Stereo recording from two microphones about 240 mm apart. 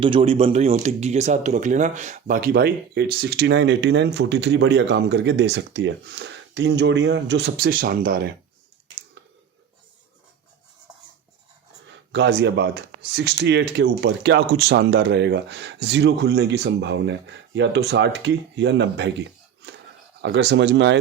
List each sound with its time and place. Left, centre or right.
0.0 s speech: right
11.9 s speech: right